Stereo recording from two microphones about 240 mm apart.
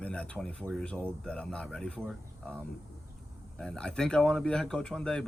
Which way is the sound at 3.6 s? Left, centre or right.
Centre.